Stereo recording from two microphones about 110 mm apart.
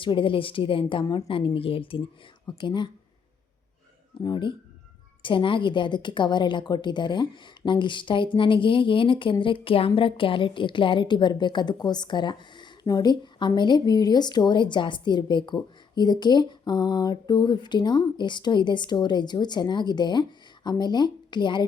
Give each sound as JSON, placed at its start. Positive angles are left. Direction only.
{"t": 0.0, "sound": "a woman's voice", "side_deg": 50}
{"t": 4.2, "sound": "a woman's voice", "side_deg": 45}